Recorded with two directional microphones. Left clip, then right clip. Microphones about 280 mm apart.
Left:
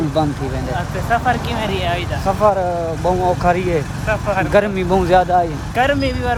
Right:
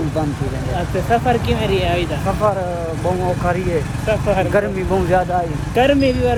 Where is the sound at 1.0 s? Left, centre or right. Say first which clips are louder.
Even; centre.